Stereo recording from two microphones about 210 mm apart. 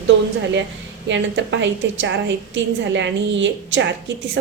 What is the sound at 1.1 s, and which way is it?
A woman's voice, 60° right (ahead or behind).